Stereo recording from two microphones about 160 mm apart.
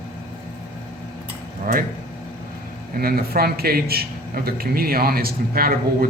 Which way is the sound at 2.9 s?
70° right (ahead or behind).